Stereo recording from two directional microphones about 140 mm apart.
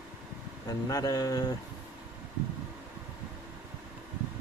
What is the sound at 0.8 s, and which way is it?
Speech, 25° left (ahead or behind).